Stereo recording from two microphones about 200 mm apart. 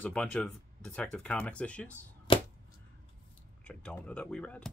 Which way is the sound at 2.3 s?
25° left (ahead or behind).